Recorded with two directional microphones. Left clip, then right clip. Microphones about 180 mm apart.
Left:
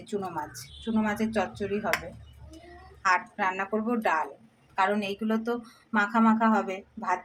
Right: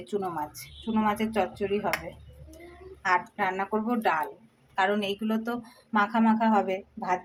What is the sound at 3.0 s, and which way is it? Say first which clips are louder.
A woman's voice: left 1 dB; 5° right (ahead or behind).